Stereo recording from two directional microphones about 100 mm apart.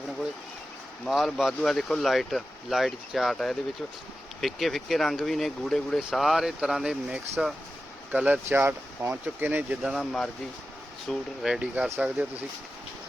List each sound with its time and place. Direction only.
1.0 s speech: centre (ahead or behind)
8.1 s speech: 15° right (ahead or behind)
9.9 s speech: centre (ahead or behind)
11.4 s speech: 5° right (ahead or behind)